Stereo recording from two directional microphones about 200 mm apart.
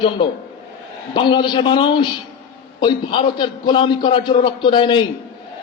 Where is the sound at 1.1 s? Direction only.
25° left (ahead or behind).